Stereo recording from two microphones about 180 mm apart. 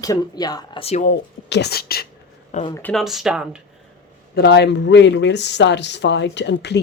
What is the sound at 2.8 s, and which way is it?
Speech, 10° left (ahead or behind).